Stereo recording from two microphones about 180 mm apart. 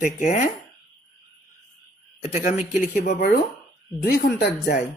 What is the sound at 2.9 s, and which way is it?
A woman's voice, 50° left (ahead or behind).